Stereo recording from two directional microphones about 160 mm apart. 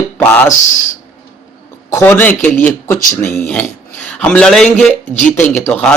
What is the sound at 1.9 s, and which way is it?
Speech, 15° left (ahead or behind).